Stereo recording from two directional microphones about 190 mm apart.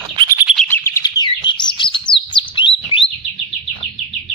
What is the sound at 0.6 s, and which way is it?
Chirp, 10° left (ahead or behind).